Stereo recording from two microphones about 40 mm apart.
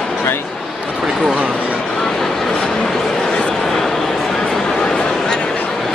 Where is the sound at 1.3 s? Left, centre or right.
Right.